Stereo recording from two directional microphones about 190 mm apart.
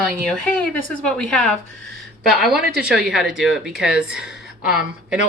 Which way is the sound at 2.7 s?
5° right (ahead or behind).